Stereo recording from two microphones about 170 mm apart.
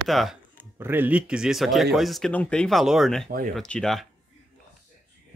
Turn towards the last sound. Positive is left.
turn(degrees=0)  # may be behind; listen again after turning